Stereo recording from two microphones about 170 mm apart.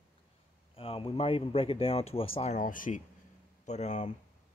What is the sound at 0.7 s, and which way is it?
Speech, 35° left (ahead or behind).